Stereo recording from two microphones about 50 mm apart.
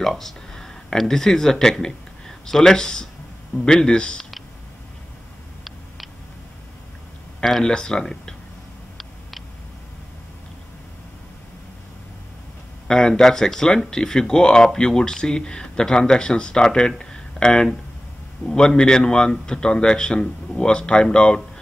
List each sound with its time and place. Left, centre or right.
0.0 s speech: centre
7.6 s speech: centre
12.8 s speech: centre